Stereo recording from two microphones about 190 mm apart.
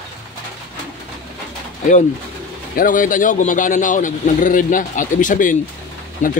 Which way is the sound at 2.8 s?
45° left (ahead or behind).